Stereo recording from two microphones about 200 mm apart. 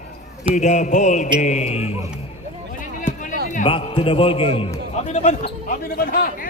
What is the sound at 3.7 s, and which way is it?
A man's voice, 25° left (ahead or behind).